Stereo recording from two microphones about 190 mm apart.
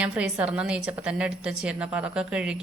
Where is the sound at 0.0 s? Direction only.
5° right (ahead or behind).